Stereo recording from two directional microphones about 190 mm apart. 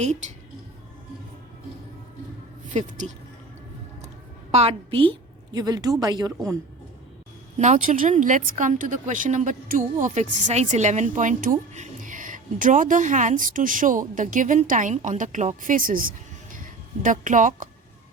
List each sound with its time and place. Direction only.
2.6 s speech: 40° right (ahead or behind)
4.5 s a woman's voice: 30° right (ahead or behind)
7.6 s a woman's voice: 40° right (ahead or behind)